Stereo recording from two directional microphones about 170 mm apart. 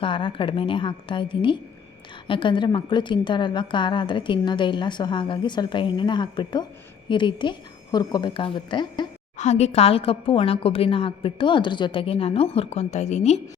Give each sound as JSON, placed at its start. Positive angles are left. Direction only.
{"t": 0.0, "sound": "a woman's voice", "side_deg": 30}
{"t": 9.4, "sound": "a woman's voice", "side_deg": 40}